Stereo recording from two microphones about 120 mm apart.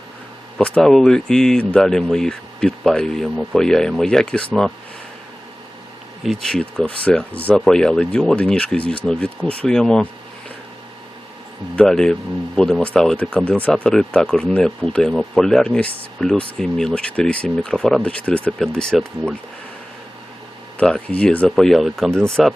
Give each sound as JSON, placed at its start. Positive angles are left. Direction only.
{"t": 0.6, "sound": "speech", "side_deg": 5}
{"t": 6.2, "sound": "speech", "side_deg": 5}
{"t": 11.8, "sound": "speech", "side_deg": 5}
{"t": 20.7, "sound": "speech", "side_deg": 10}